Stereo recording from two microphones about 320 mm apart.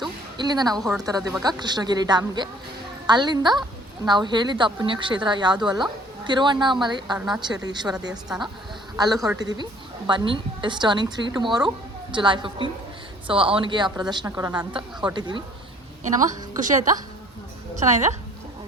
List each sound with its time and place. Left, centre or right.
0.3 s a woman's voice: centre
0.8 s a woman's voice: centre
1.0 s a woman's voice: centre
9.2 s a woman's voice: centre
16.6 s a woman's voice: right